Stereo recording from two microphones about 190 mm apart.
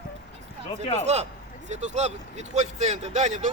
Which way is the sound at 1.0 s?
35° right (ahead or behind).